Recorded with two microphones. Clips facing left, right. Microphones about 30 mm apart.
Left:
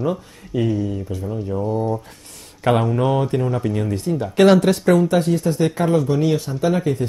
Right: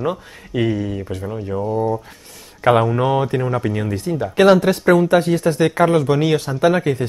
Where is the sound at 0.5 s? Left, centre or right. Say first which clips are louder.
Right 1 dB; right.